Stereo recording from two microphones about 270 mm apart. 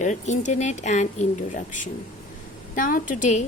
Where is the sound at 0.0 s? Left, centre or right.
Left.